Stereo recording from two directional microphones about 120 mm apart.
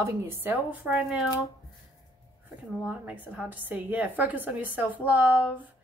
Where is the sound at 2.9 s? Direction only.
10° right (ahead or behind).